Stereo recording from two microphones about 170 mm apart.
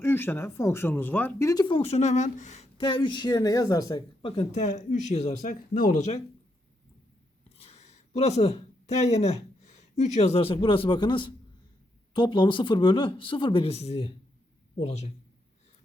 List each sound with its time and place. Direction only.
0.0 s speech: 15° left (ahead or behind); by 6.1 s 45° left (ahead or behind)
7.6 s speech: 40° left (ahead or behind)